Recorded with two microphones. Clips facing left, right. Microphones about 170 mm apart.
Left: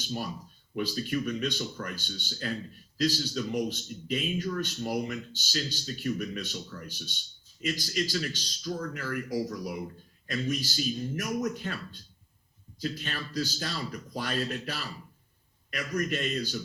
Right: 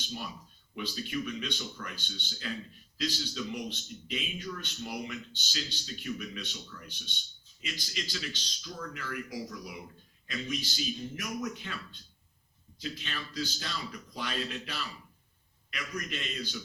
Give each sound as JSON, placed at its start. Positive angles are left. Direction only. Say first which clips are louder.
{"t": 0.8, "sound": "a man's voice", "louder": "left 5 dB", "side_deg": 45}